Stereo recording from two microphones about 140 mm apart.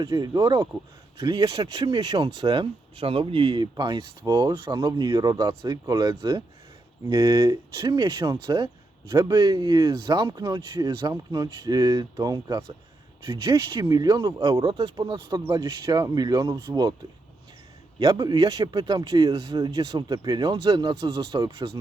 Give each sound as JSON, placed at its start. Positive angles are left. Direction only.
{"t": 0.0, "sound": "speech", "side_deg": -30}
{"t": 18.0, "sound": "speech", "side_deg": -30}